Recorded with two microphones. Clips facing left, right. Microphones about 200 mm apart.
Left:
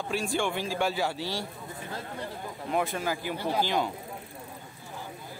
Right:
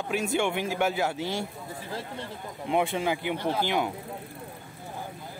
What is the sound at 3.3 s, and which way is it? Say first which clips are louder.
Speech: even; 10° left (ahead or behind).